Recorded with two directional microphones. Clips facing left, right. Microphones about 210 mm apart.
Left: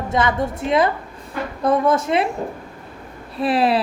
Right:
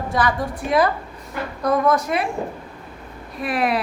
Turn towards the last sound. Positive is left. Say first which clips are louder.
# left 4 dB
turn(degrees=30)  # may be behind; listen again after turning